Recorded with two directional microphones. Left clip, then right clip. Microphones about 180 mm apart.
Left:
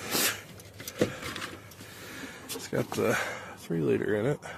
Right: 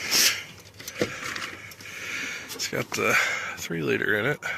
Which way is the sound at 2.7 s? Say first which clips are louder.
Right 5 dB; 15° left (ahead or behind).